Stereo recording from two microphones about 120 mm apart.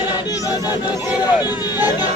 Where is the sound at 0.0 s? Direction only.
35° left (ahead or behind).